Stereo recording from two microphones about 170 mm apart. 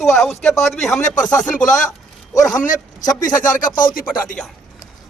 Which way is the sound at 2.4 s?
20° left (ahead or behind).